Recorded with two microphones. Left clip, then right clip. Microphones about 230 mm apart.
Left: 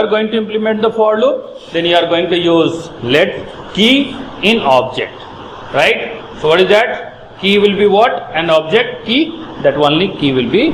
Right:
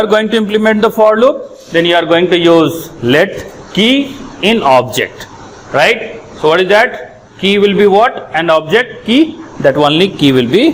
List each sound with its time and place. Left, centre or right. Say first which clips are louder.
0.0 s a man's voice: right 3 dB; right
5.7 s a man's voice: right 2 dB; right
9.6 s a man's voice: right 2 dB; right